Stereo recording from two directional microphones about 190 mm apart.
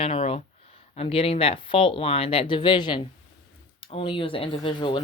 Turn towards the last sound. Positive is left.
turn(degrees=25)  # may be behind; listen again after turning